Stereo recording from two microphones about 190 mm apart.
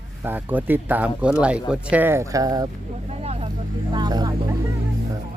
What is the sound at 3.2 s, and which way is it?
Vehicle, 35° right (ahead or behind).